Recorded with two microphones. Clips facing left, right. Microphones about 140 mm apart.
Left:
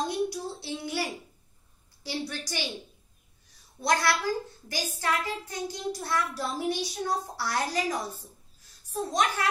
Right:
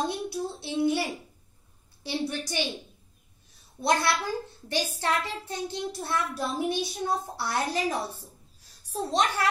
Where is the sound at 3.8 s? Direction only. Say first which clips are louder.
Right 1 dB; 20° right (ahead or behind).